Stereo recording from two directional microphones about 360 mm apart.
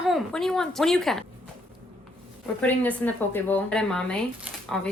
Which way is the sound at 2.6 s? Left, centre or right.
Centre.